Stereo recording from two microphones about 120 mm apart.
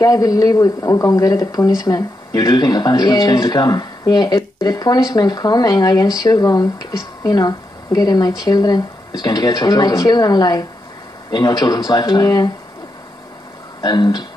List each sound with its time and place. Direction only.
0.0 s speech: 30° left (ahead or behind)
13.7 s speech: 35° left (ahead or behind)